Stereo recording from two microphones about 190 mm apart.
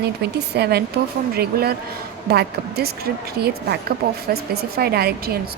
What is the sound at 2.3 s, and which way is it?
A woman's voice, 55° right (ahead or behind).